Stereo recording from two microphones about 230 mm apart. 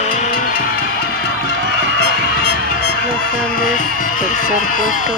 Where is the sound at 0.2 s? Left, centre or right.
Left.